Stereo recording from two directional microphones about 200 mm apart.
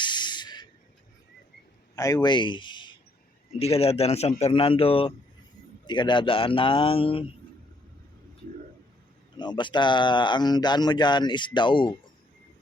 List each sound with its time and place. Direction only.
0.0 s spray: 20° left (ahead or behind)
2.0 s a man's voice: 20° left (ahead or behind)
9.4 s speech: 20° left (ahead or behind)